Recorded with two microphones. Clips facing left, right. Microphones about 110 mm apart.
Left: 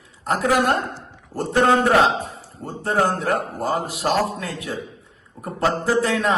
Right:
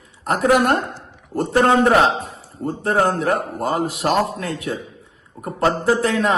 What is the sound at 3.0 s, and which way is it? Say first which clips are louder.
Speech: right 2 dB; centre (ahead or behind).